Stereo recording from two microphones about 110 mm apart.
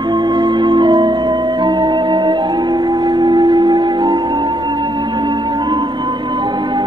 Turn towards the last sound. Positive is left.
turn(degrees=-45)  # may be behind; listen again after turning